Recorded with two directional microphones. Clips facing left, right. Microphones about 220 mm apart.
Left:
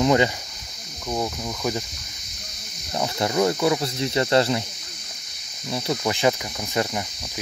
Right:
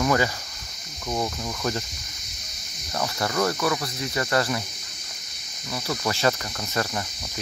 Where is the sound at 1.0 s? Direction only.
5° left (ahead or behind).